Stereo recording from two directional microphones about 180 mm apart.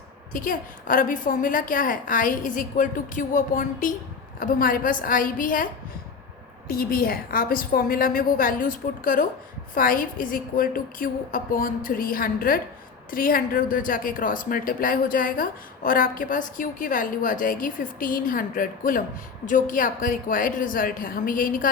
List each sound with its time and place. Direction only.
0.3 s a woman's voice: 45° left (ahead or behind)
6.7 s a woman's voice: 55° left (ahead or behind)